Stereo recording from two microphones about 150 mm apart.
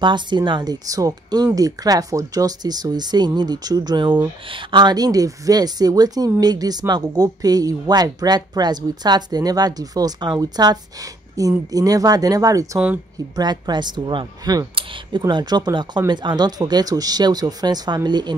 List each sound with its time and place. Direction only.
0.0 s speech: 30° right (ahead or behind)
12.7 s speech: 10° right (ahead or behind)
13.4 s speech: 30° right (ahead or behind)